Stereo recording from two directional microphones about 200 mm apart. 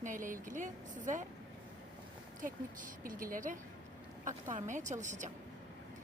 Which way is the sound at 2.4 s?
45° right (ahead or behind).